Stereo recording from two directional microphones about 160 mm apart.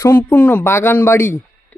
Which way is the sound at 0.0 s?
15° left (ahead or behind).